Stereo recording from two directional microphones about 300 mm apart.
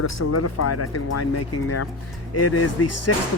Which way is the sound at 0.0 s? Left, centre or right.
Left.